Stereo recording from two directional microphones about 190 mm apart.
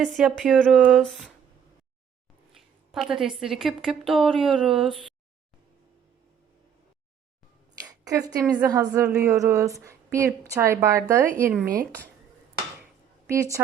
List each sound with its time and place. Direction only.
0.0 s a woman's voice: centre (ahead or behind)
2.5 s a woman's voice: centre (ahead or behind)
7.8 s a woman's voice: 20° right (ahead or behind)
13.2 s a woman's voice: 15° right (ahead or behind)